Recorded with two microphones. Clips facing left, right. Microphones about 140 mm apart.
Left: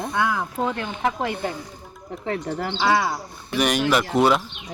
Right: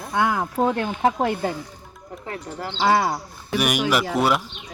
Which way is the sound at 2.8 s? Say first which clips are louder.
Right 2 dB; 40° right (ahead or behind).